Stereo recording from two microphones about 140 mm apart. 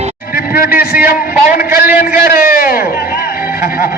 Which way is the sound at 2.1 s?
90° left.